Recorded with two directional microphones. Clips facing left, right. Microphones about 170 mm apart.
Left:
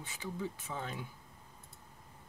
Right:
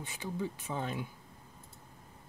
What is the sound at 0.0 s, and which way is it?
Speech, 20° right (ahead or behind).